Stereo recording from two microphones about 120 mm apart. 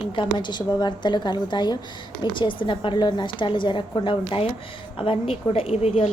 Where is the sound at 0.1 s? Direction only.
40° left (ahead or behind).